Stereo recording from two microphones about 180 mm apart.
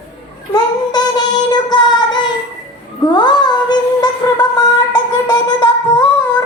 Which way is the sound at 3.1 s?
25° left (ahead or behind).